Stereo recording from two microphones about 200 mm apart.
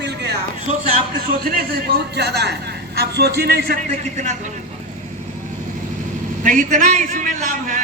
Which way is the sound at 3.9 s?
35° right (ahead or behind).